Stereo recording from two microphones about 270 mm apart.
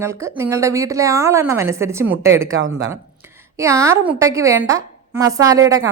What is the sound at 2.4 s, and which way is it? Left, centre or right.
Speech, right.